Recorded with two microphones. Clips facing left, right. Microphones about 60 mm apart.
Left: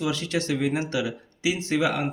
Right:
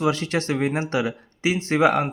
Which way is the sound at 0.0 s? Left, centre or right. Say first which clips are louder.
Right 4 dB; right.